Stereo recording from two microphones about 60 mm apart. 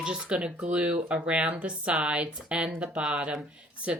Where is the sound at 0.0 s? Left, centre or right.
Centre.